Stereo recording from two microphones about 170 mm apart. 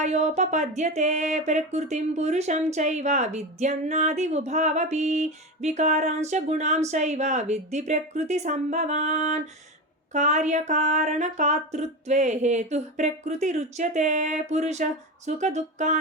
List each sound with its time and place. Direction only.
0.0 s speech: 45° right (ahead or behind)